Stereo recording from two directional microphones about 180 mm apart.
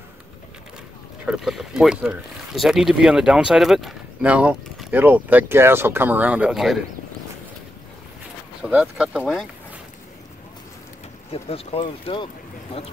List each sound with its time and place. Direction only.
1.2 s speech: 5° right (ahead or behind)
8.6 s speech: 5° right (ahead or behind)
11.4 s speech: 30° left (ahead or behind)